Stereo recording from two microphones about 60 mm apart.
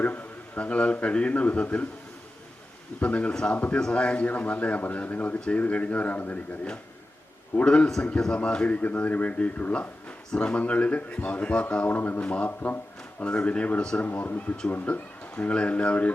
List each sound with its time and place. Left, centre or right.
0.0 s a man's voice: left
3.0 s a man's voice: left
7.6 s speech: centre
8.7 s a man's voice: left
11.9 s speech: left
12.2 s a man's voice: left
12.5 s a man's voice: left